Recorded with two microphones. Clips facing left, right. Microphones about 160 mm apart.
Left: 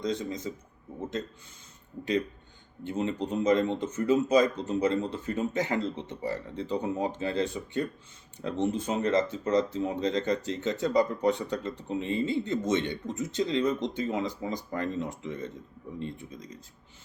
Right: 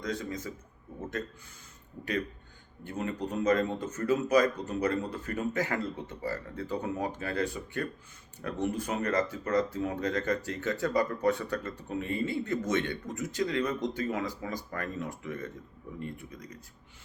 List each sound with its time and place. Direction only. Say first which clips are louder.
0.0 s speech: left 4 dB; 20° left (ahead or behind)
2.8 s speech: left 4 dB; 20° left (ahead or behind)